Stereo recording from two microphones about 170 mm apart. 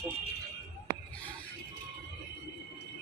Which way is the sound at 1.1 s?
10° left (ahead or behind).